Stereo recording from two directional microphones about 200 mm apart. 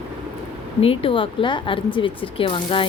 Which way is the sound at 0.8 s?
25° left (ahead or behind).